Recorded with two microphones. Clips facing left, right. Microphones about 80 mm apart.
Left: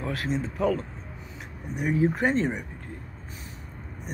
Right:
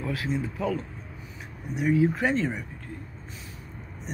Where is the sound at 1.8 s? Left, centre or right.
Left.